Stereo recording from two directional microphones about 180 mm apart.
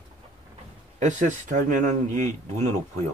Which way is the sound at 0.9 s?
45° right (ahead or behind).